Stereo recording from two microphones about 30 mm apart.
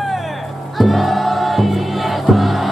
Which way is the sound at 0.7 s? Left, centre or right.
Centre.